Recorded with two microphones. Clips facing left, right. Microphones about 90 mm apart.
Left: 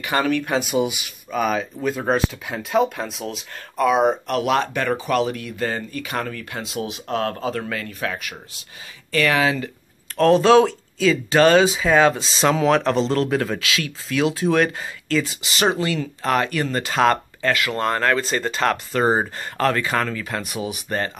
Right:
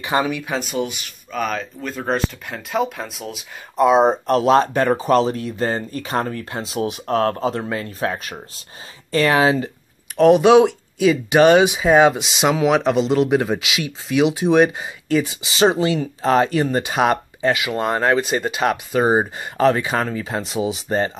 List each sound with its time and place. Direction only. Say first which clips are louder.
0.0 s speech: right 2 dB; 20° right (ahead or behind)
0.3 s speech: left 3 dB; centre (ahead or behind)
3.7 s speech: right 3 dB; 25° right (ahead or behind)
10.1 s speech: right 2 dB; 15° right (ahead or behind)